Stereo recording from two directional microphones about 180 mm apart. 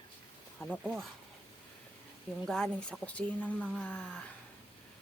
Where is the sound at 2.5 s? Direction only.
5° left (ahead or behind).